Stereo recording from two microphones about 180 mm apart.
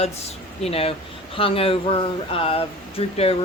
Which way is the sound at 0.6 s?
30° left (ahead or behind).